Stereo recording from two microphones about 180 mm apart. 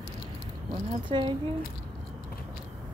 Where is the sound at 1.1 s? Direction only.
30° right (ahead or behind).